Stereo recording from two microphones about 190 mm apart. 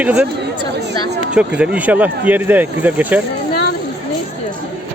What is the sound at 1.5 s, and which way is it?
Speech, 5° right (ahead or behind).